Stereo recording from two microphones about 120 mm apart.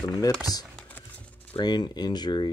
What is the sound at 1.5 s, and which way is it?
Speech, 35° left (ahead or behind).